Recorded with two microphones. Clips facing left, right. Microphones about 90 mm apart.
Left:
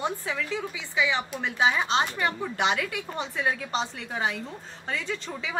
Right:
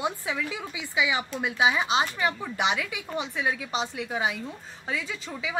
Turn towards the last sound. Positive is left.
turn(degrees=-5)  # may be behind; listen again after turning